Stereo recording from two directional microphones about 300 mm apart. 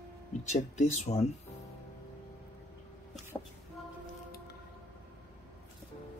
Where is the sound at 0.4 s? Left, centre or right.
Left.